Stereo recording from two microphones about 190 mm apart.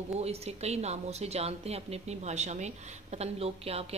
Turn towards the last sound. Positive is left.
turn(degrees=-30)  # may be behind; listen again after turning